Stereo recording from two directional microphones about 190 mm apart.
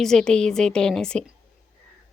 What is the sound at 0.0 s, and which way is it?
Speech, 5° left (ahead or behind).